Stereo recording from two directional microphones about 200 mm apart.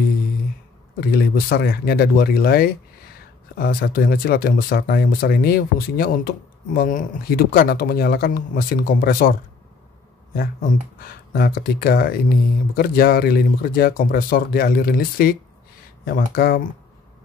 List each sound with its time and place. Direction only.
1.1 s speech: 50° left (ahead or behind)
10.3 s speech: 50° left (ahead or behind)